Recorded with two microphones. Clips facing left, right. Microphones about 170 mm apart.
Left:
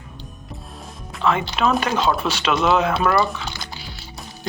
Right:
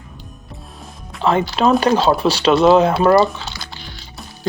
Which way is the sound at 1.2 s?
35° right (ahead or behind).